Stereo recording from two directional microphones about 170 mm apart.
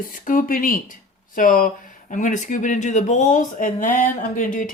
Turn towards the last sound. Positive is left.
turn(degrees=55)  # may be behind; listen again after turning